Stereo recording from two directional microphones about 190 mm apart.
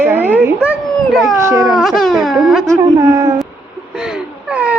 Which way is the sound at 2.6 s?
20° right (ahead or behind).